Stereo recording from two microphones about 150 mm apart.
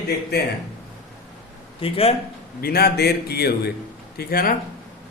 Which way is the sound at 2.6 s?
90° left.